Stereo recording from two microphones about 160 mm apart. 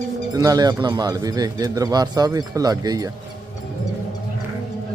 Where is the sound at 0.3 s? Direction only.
25° right (ahead or behind).